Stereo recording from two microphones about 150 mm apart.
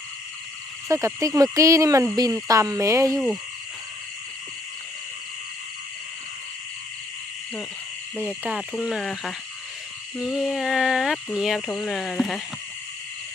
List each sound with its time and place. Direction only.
0.9 s speech: 20° right (ahead or behind)
8.4 s speech: 5° right (ahead or behind)